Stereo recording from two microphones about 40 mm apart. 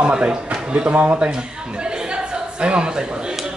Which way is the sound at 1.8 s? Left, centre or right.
Right.